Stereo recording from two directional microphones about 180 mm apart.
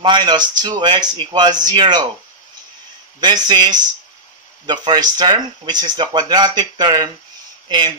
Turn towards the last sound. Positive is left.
turn(degrees=-25)  # may be behind; listen again after turning